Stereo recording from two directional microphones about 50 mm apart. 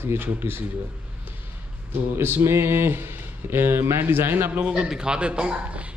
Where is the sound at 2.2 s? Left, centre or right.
Right.